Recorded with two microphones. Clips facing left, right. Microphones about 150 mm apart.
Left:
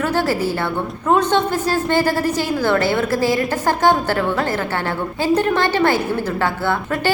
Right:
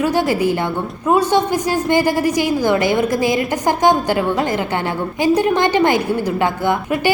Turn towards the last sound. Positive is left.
turn(degrees=-15)  # may be behind; listen again after turning